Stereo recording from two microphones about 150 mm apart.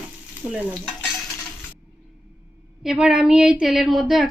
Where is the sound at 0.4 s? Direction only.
10° right (ahead or behind).